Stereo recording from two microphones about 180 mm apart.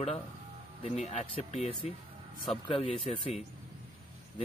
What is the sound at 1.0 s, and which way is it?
Speech, 35° left (ahead or behind).